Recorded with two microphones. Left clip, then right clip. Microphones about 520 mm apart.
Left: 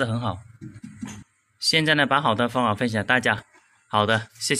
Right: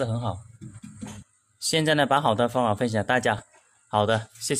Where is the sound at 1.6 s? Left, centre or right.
Right.